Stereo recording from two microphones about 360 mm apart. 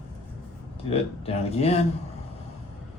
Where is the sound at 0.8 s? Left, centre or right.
Centre.